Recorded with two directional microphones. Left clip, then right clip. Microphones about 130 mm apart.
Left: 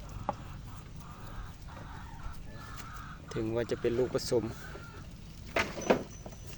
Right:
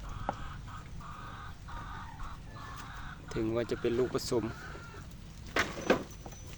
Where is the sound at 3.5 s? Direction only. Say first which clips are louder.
Left 1 dB; centre (ahead or behind).